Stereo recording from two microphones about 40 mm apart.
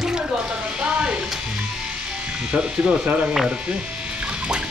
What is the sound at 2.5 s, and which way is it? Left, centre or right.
Speech, right.